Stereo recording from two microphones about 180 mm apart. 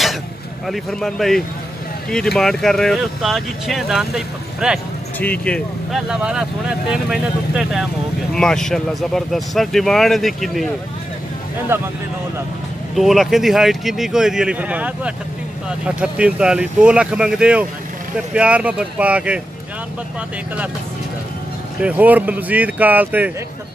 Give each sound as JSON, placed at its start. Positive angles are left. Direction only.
{"t": 0.7, "sound": "speech", "side_deg": 0}
{"t": 5.2, "sound": "speech", "side_deg": 10}
{"t": 11.7, "sound": "speech", "side_deg": -10}
{"t": 12.9, "sound": "speech", "side_deg": 0}
{"t": 21.8, "sound": "speech", "side_deg": -10}